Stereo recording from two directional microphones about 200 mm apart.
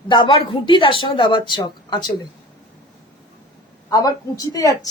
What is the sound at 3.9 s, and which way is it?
Speech, 20° left (ahead or behind).